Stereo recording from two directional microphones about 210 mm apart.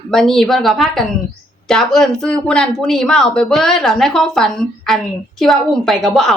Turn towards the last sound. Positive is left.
turn(degrees=0)  # may be behind; listen again after turning